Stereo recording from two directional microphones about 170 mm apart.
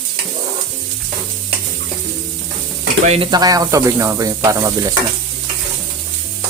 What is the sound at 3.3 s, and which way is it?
Stir, 20° right (ahead or behind).